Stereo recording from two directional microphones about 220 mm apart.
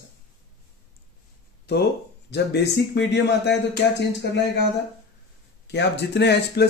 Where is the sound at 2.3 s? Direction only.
50° left (ahead or behind).